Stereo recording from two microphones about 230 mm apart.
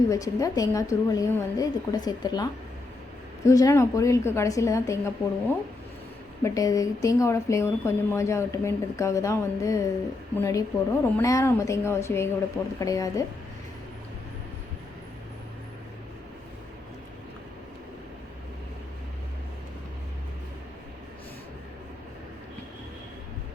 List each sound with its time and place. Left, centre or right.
0.1 s speech: centre